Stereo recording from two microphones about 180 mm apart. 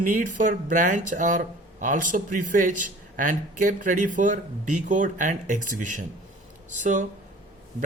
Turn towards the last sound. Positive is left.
turn(degrees=-45)  # may be behind; listen again after turning